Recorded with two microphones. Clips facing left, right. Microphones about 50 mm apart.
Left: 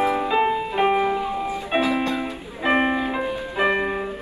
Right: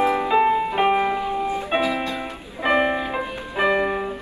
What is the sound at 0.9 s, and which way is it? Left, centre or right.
Music, right.